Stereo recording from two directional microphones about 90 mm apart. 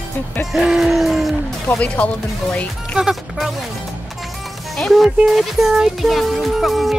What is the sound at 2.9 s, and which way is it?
Speech, 5° right (ahead or behind).